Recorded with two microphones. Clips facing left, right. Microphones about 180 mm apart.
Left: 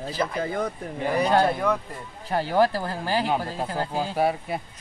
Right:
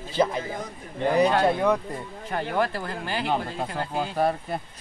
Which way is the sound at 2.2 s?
35° left (ahead or behind).